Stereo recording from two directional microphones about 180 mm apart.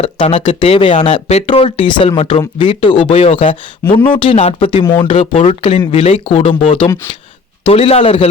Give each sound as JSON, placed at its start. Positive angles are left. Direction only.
{"t": 0.0, "sound": "speech", "side_deg": 35}